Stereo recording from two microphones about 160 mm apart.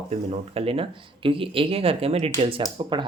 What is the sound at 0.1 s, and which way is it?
Speech, 40° right (ahead or behind).